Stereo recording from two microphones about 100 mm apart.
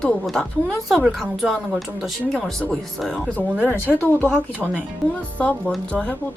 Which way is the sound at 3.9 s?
20° left (ahead or behind).